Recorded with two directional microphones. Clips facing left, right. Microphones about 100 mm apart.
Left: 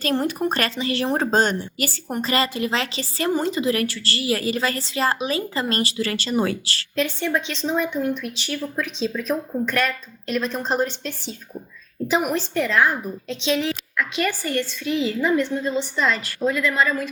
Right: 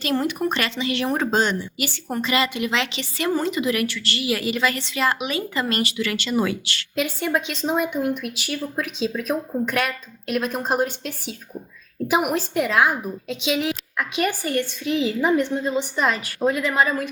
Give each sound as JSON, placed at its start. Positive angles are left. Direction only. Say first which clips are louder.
{"t": 0.3, "sound": "a woman's voice", "louder": "left 1 dB", "side_deg": 35}
{"t": 1.3, "sound": "a woman's voice", "louder": "left 1 dB", "side_deg": 45}
{"t": 6.9, "sound": "speech", "louder": "even", "side_deg": -10}